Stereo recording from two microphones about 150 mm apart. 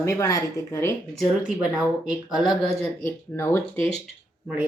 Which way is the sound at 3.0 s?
15° left (ahead or behind).